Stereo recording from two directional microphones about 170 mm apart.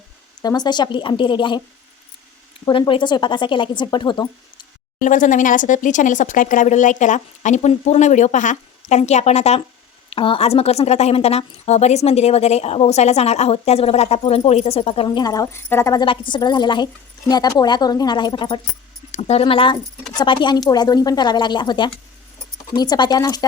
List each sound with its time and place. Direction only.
0.4 s a woman's voice: 25° left (ahead or behind)
2.6 s a woman's voice: 30° left (ahead or behind)
4.9 s a woman's voice: 50° left (ahead or behind); by 23.5 s 25° left (ahead or behind)